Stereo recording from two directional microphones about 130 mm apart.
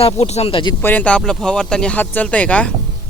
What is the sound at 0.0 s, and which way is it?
Speech, 55° left (ahead or behind).